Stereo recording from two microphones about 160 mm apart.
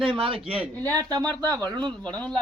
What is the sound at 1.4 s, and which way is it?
Speech, 25° right (ahead or behind).